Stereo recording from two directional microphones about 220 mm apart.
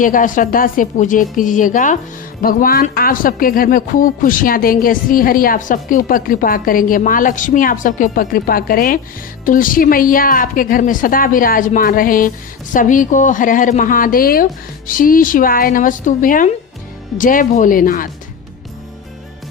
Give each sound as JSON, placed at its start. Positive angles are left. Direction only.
{"t": 0.0, "sound": "speech", "side_deg": 35}